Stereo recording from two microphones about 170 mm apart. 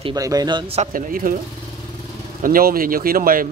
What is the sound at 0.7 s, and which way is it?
Speech, 55° right (ahead or behind).